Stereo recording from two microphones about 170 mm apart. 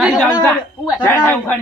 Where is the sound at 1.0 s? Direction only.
10° left (ahead or behind).